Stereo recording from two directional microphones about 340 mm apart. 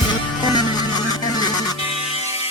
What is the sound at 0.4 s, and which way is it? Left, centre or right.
Music, centre.